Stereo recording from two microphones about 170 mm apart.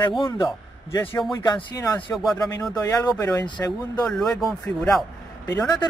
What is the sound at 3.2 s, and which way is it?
Speech, 20° left (ahead or behind).